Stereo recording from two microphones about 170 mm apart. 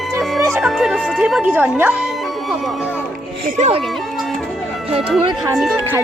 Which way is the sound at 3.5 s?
45° right (ahead or behind).